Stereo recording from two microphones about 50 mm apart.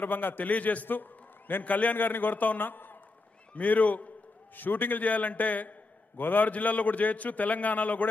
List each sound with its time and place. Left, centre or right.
0.0 s a man's voice: left